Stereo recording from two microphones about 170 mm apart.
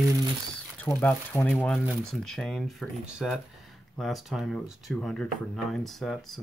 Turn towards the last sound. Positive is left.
turn(degrees=0)  # may be behind; listen again after turning